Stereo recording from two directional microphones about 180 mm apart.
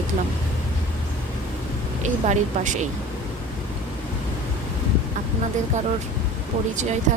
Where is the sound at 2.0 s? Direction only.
45° right (ahead or behind).